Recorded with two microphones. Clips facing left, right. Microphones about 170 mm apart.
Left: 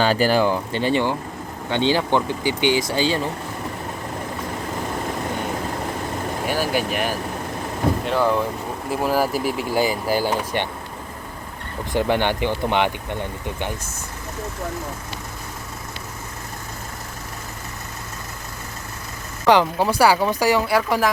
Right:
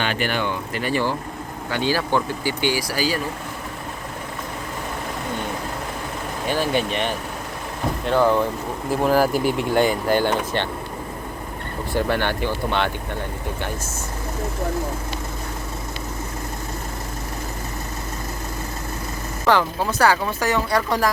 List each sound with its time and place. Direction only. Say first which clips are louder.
0.0 s speech: left 6 dB; 35° left (ahead or behind)
6.5 s speech: right 2 dB; 5° left (ahead or behind)
11.9 s speech: left 2 dB; 15° left (ahead or behind)
19.5 s speech: left 3 dB; 15° left (ahead or behind)